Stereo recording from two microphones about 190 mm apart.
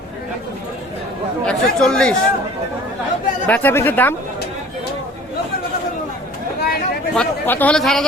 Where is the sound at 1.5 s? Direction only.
5° left (ahead or behind).